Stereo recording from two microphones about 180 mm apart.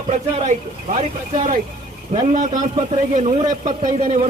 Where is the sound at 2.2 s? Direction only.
40° right (ahead or behind).